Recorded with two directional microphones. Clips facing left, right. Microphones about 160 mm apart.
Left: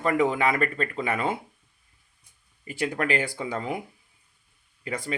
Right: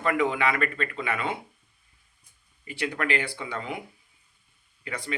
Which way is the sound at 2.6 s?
45° left (ahead or behind).